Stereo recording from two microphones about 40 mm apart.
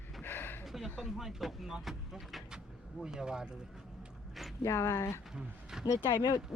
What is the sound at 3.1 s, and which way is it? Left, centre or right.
Speech, centre.